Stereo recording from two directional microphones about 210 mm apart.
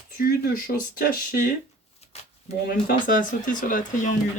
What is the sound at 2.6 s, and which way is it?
Speech, 45° left (ahead or behind).